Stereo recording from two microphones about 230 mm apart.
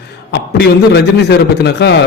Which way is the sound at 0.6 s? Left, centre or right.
Left.